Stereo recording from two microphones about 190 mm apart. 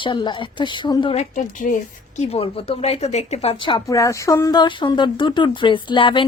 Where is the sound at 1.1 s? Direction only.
40° left (ahead or behind).